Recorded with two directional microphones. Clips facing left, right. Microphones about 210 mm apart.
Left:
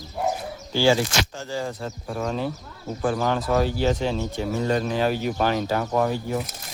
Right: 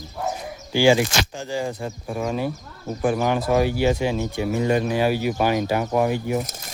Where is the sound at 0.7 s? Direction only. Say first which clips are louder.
Right 3 dB; 15° right (ahead or behind).